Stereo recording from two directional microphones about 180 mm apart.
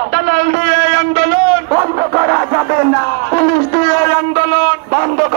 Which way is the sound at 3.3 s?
15° left (ahead or behind).